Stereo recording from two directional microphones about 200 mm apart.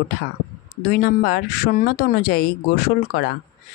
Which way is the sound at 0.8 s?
45° left (ahead or behind).